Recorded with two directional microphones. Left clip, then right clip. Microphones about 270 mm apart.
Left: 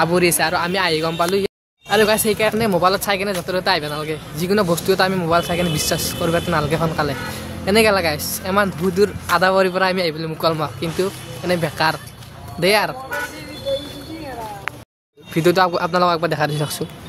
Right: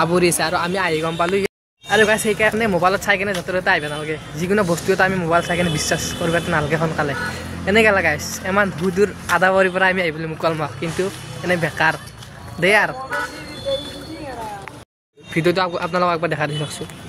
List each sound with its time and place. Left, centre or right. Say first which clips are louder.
0.0 s speech: left 1 dB; centre
15.3 s speech: left 3 dB; centre